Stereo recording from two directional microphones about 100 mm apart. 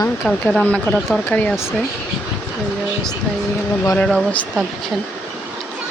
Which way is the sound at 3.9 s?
10° left (ahead or behind).